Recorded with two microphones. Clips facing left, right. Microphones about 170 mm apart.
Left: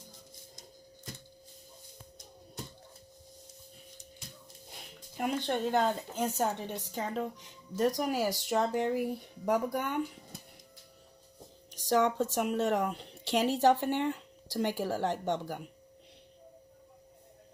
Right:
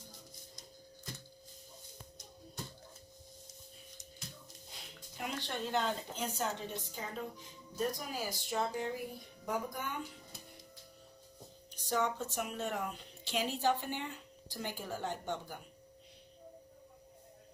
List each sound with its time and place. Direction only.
4.7 s speech: 55° left (ahead or behind)
6.7 s speech: 65° left (ahead or behind)
11.7 s speech: 85° left